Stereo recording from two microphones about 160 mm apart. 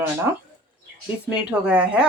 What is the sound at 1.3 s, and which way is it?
Speech, 5° right (ahead or behind).